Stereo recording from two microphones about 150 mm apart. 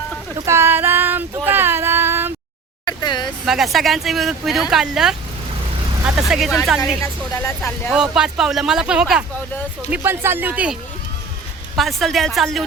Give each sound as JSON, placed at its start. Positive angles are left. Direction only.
{"t": 0.3, "sound": "a sound", "side_deg": -20}
{"t": 2.8, "sound": "a sound", "side_deg": 30}
{"t": 3.4, "sound": "speech", "side_deg": 0}
{"t": 7.0, "sound": "speech", "side_deg": 20}
{"t": 7.9, "sound": "speech", "side_deg": -5}
{"t": 11.8, "sound": "speech", "side_deg": 0}